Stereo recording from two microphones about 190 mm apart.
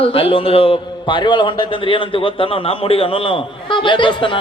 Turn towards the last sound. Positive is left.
turn(degrees=25)  # may be behind; listen again after turning